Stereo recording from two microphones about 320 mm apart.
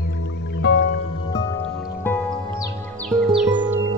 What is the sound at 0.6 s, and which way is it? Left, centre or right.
Music, left.